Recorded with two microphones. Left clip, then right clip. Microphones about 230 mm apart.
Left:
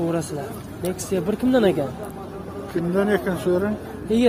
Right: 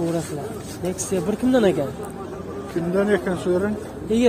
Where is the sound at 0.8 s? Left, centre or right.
Centre.